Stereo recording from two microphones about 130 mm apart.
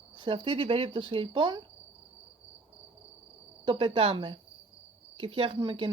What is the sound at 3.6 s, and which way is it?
Speech, 40° right (ahead or behind).